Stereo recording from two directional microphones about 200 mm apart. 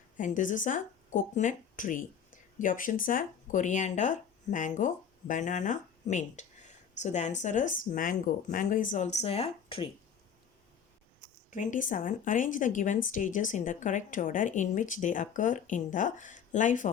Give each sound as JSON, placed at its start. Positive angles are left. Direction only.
{"t": 0.2, "sound": "speech", "side_deg": 40}
{"t": 11.5, "sound": "speech", "side_deg": 40}